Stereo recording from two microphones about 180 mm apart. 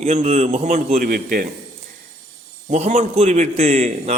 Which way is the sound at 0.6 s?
45° right (ahead or behind).